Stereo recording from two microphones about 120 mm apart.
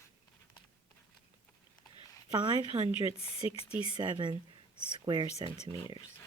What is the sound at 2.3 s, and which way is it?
Speech, 40° right (ahead or behind).